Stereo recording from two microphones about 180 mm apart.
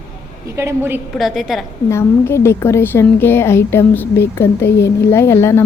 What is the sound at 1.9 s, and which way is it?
Speech, 15° left (ahead or behind).